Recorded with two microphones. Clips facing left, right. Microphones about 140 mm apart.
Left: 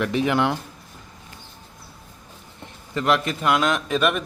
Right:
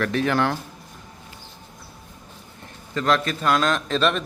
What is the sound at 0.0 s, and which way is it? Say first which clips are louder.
Speech: left 1 dB; 15° left (ahead or behind).